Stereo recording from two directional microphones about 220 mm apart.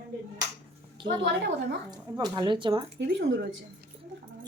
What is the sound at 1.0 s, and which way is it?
A woman's voice, 20° right (ahead or behind).